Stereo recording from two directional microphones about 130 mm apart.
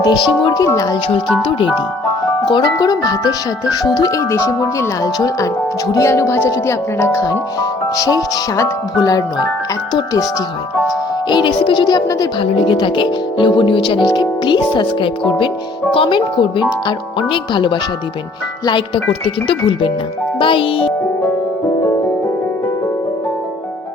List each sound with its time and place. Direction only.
0.0 s speech: 30° left (ahead or behind)
10.8 s speech: 35° left (ahead or behind)
12.5 s a child's voice: 45° left (ahead or behind)
19.5 s a child's voice: 40° left (ahead or behind)